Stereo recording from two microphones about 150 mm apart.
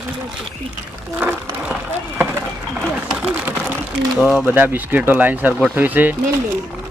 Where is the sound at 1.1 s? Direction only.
10° right (ahead or behind).